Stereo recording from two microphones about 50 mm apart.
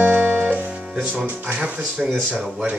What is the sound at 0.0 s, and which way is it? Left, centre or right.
Music, right.